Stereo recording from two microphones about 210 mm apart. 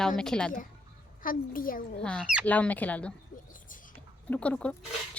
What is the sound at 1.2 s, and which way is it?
Speech, 40° left (ahead or behind).